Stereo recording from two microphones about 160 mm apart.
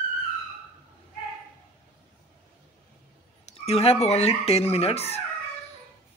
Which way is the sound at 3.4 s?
40° left (ahead or behind).